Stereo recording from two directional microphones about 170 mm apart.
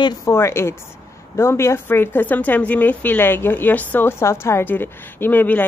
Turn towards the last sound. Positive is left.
turn(degrees=10)  # may be behind; listen again after turning